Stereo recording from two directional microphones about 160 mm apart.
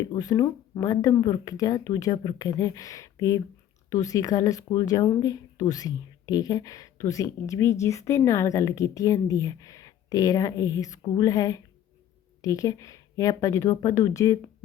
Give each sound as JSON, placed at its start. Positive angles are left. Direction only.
{"t": 0.0, "sound": "speech", "side_deg": 25}